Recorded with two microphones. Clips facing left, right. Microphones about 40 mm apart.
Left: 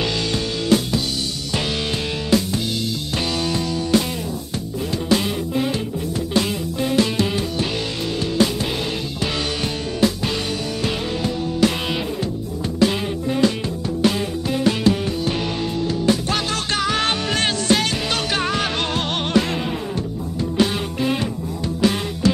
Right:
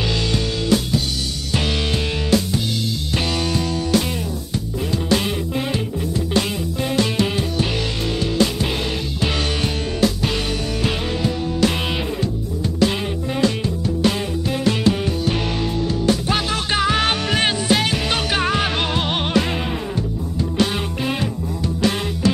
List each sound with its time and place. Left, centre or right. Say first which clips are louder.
3.2 s music: right 1 dB; centre
5.2 s music: left 1 dB; centre
6.8 s music: left 1 dB; centre
12.9 s music: left 1 dB; centre
20.7 s music: left 1 dB; centre